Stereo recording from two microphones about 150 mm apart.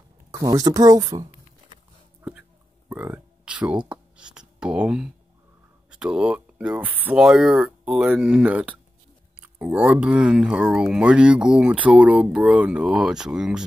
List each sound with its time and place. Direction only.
0.3 s speech: 25° right (ahead or behind)
2.9 s a sound: 10° right (ahead or behind)
5.9 s speech: 5° right (ahead or behind)